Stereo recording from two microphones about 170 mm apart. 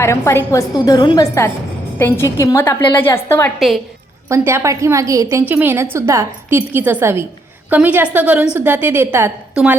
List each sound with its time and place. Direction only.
0.0 s a woman's voice: 15° left (ahead or behind)
4.3 s a woman's voice: 15° right (ahead or behind)